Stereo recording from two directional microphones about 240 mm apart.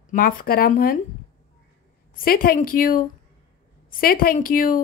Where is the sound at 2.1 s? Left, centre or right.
Left.